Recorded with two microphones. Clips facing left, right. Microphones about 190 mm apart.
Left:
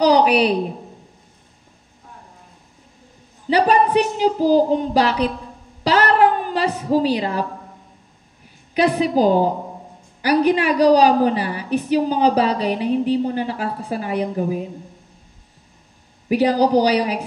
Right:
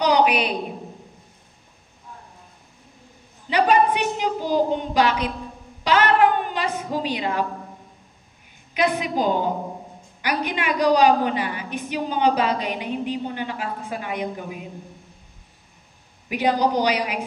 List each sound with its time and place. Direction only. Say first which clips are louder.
0.0 s a woman's voice: left 5 dB; 35° left (ahead or behind)
3.4 s a woman's voice: left 2 dB; 35° left (ahead or behind)
5.9 s a sound: left 2 dB; 35° left (ahead or behind)
8.7 s a woman's voice: left 5 dB; 35° left (ahead or behind)
16.3 s a woman's voice: left 5 dB; 35° left (ahead or behind)